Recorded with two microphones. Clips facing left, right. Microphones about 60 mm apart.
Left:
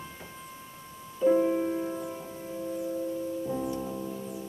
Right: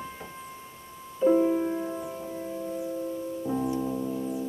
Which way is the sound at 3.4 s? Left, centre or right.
Centre.